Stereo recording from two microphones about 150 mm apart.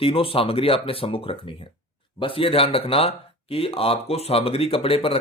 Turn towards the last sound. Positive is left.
turn(degrees=40)  # may be behind; listen again after turning